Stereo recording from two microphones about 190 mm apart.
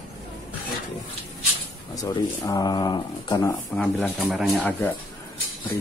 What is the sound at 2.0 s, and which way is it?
Speech, 20° left (ahead or behind).